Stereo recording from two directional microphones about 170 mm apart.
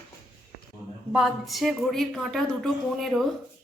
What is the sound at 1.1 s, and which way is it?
A woman's voice, centre (ahead or behind).